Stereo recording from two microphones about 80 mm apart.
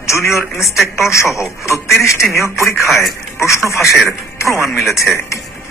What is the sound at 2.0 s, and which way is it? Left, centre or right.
Speech, left.